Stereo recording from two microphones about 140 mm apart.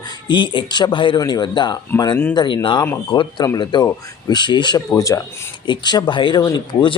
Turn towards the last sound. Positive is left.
turn(degrees=30)  # may be behind; listen again after turning